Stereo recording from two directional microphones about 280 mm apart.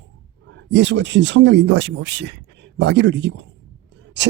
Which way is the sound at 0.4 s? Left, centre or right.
Right.